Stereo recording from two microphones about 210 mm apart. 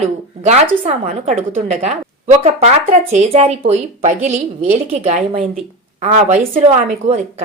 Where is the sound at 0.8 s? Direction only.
35° right (ahead or behind).